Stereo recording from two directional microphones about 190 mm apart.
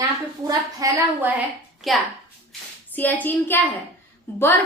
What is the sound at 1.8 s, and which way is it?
A child's voice, centre (ahead or behind).